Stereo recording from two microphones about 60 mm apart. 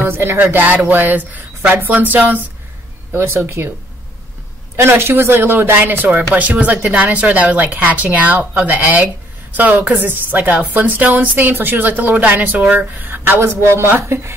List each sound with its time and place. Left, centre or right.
0.1 s speech: right
3.1 s speech: right
4.7 s speech: right
13.6 s speech: right